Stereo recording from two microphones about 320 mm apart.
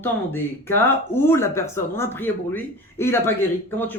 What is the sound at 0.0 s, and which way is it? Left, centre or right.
Speech, centre.